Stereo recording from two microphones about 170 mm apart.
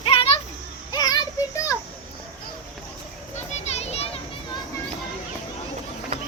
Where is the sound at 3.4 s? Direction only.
40° left (ahead or behind).